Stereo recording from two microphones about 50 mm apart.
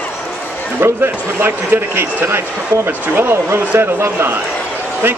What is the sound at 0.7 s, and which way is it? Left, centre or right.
Speech, right.